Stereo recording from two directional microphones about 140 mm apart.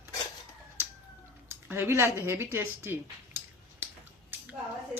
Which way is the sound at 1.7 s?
15° right (ahead or behind).